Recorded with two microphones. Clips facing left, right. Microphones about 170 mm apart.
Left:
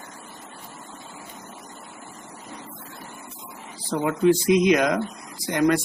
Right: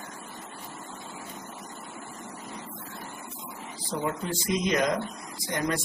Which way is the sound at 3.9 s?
70° left (ahead or behind).